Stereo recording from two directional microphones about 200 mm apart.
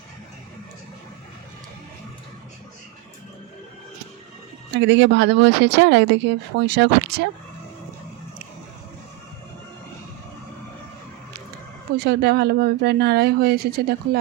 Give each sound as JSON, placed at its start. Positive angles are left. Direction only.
{"t": 4.7, "sound": "speech", "side_deg": -65}
{"t": 11.9, "sound": "speech", "side_deg": -55}